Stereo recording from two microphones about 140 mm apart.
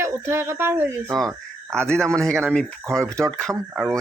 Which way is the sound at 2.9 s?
20° right (ahead or behind).